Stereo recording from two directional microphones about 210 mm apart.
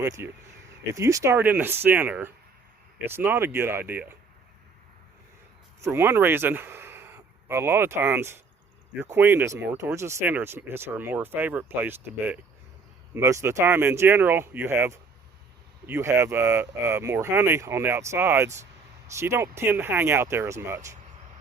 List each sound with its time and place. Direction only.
0.0 s speech: 15° right (ahead or behind)
5.8 s speech: 10° right (ahead or behind)